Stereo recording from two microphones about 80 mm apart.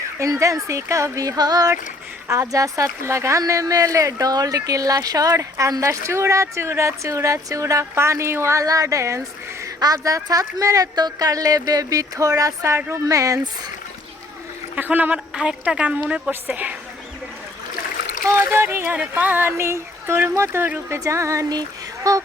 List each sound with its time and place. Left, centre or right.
0.2 s speech: right
2.2 s speech: right
9.6 s speech: right
14.8 s speech: right
15.4 s a woman's voice: centre
18.3 s speech: right